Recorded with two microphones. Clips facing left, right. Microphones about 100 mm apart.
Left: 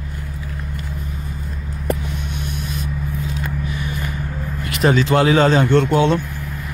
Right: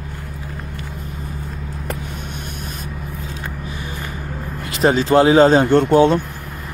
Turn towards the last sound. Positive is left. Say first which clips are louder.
# right 1 dB
turn(degrees=-50)  # may be behind; listen again after turning